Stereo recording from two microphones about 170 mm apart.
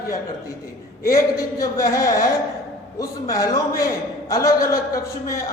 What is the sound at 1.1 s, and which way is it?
A man's voice, 20° left (ahead or behind).